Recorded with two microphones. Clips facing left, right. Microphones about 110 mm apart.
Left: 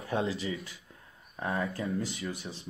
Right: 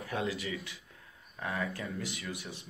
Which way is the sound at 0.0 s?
30° left (ahead or behind).